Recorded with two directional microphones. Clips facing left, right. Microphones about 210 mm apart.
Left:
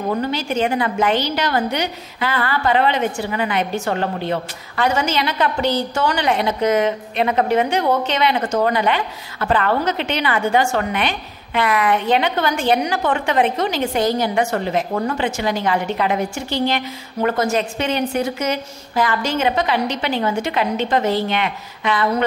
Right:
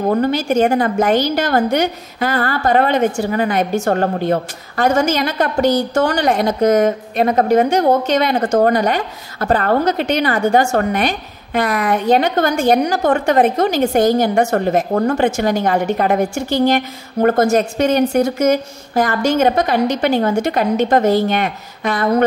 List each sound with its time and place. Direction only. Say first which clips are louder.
0.0 s a woman's voice: right 6 dB; 45° right (ahead or behind)